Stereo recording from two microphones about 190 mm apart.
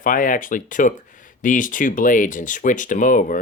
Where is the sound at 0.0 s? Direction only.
45° left (ahead or behind).